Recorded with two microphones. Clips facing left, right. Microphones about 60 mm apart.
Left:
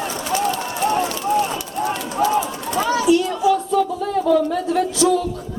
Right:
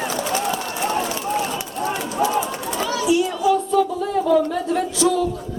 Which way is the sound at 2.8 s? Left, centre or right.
Left.